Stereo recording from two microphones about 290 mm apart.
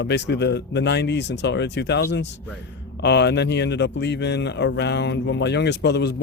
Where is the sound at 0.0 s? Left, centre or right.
Left.